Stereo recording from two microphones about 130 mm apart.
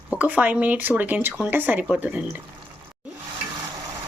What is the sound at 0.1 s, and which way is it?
Speech, 10° right (ahead or behind).